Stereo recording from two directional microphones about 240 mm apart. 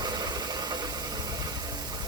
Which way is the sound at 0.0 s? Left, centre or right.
Centre.